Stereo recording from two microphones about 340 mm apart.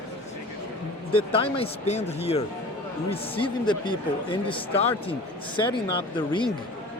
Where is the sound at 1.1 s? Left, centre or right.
Centre.